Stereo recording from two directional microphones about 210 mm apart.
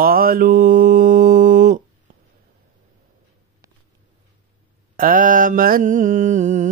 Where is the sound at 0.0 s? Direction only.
45° right (ahead or behind).